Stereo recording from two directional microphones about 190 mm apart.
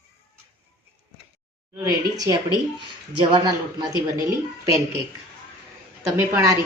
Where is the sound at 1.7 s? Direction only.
20° right (ahead or behind).